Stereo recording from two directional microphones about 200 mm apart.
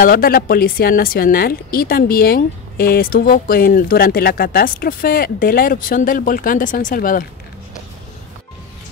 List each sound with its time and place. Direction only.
0.0 s speech: 45° left (ahead or behind)